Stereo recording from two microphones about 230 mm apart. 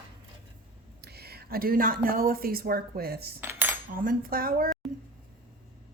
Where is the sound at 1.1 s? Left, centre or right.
Right.